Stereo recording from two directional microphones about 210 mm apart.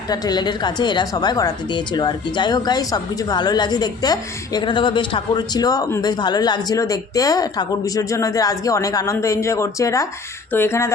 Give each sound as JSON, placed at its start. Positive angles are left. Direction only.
{"t": 0.1, "sound": "a woman's voice", "side_deg": 20}